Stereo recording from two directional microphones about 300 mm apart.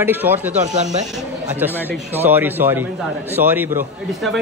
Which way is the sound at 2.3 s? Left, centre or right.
Centre.